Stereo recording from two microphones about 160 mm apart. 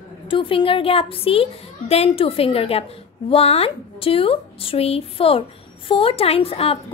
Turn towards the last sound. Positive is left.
turn(degrees=35)  # may be behind; listen again after turning